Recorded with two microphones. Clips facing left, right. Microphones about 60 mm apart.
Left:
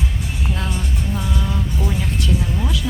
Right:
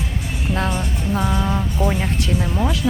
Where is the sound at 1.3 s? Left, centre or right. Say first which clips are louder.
Right 3 dB; right.